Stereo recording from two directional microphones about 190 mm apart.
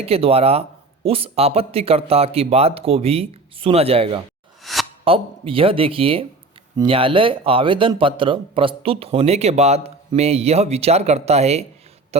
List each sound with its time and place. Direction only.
0.0 s speech: 30° right (ahead or behind)
4.6 s a sound: centre (ahead or behind)
5.0 s speech: 30° right (ahead or behind)